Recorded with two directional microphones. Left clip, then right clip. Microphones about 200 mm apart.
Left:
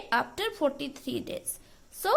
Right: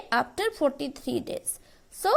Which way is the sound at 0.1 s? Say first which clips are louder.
Right 2 dB; 25° right (ahead or behind).